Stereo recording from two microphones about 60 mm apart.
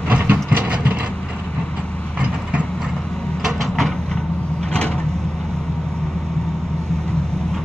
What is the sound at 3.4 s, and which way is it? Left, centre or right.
Vehicle, centre.